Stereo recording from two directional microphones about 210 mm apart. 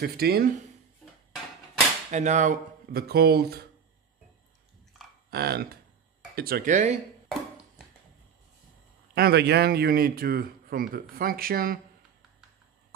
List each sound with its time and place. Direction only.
0.0 s speech: 50° right (ahead or behind)
2.0 s speech: 35° right (ahead or behind)
5.3 s speech: 50° right (ahead or behind)
9.1 s speech: 50° right (ahead or behind)